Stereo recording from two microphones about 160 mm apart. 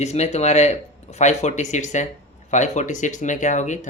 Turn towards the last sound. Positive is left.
turn(degrees=50)  # may be behind; listen again after turning